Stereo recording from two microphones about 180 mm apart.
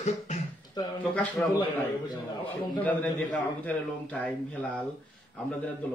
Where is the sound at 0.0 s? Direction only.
40° left (ahead or behind).